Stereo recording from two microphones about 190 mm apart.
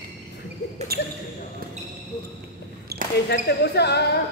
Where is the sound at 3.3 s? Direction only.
60° left (ahead or behind).